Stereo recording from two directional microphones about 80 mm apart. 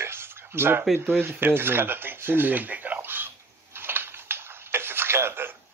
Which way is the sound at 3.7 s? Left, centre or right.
Right.